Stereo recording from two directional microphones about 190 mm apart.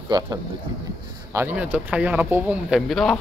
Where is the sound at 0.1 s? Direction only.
25° right (ahead or behind).